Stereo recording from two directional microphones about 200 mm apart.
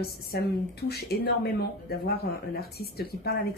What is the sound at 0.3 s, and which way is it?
Speech, 50° left (ahead or behind).